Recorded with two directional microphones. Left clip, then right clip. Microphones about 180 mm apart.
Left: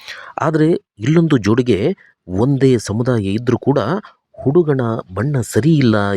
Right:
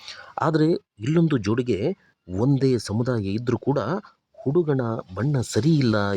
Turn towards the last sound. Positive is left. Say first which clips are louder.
# left 7 dB
turn(degrees=20)  # may be behind; listen again after turning